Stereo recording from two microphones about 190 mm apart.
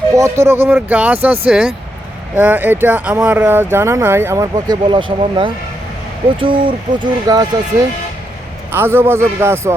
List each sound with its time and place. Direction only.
0.1 s speech: 15° right (ahead or behind)
8.7 s speech: 10° right (ahead or behind)